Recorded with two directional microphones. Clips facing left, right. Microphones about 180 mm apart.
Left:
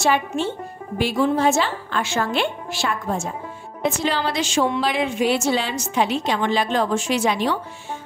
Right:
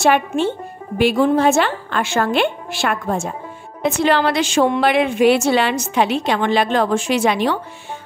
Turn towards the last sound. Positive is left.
turn(degrees=-65)  # may be behind; listen again after turning